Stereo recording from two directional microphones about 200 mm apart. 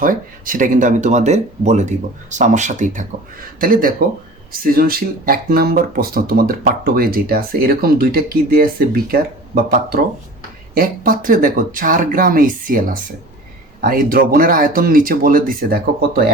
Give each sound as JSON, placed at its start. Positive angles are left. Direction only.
{"t": 0.0, "sound": "speech", "side_deg": -45}
{"t": 10.8, "sound": "speech", "side_deg": -45}